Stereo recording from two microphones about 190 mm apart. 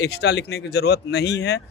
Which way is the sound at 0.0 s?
65° left (ahead or behind).